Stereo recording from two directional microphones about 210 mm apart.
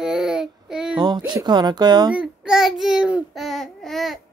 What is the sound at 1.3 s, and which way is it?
Speech, 20° right (ahead or behind).